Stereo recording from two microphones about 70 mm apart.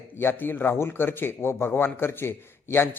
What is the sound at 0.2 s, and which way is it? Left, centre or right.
A man's voice, left.